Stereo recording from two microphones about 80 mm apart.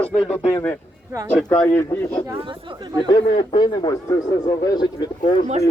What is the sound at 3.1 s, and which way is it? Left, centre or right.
Speech, left.